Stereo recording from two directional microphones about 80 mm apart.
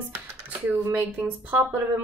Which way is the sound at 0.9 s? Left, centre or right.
Right.